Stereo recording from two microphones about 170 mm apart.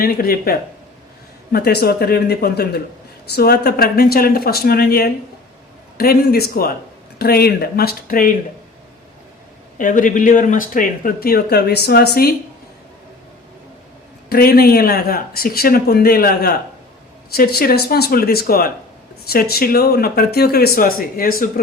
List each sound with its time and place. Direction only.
0.0 s speech: 60° left (ahead or behind)
1.5 s speech: 70° left (ahead or behind)
9.7 s speech: 50° left (ahead or behind); by 12.3 s 65° left (ahead or behind)
14.3 s speech: 65° left (ahead or behind)